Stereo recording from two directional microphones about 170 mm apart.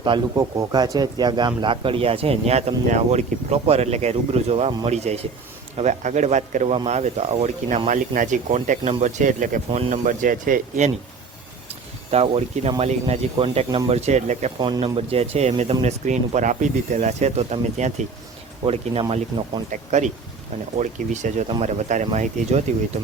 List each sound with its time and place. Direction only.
0.0 s speech: 25° right (ahead or behind); by 10.9 s 45° right (ahead or behind)
12.1 s speech: 35° right (ahead or behind)
14.6 s speech: 25° right (ahead or behind)
19.7 s speech: 45° right (ahead or behind)